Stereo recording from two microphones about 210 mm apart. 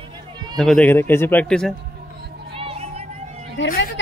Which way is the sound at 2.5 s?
25° right (ahead or behind).